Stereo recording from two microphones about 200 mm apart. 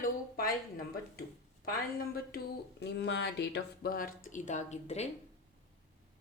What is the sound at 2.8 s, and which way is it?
Speech, 65° left (ahead or behind).